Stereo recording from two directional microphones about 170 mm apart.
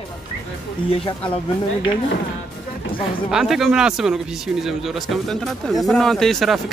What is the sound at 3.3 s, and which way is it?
Speech, centre (ahead or behind).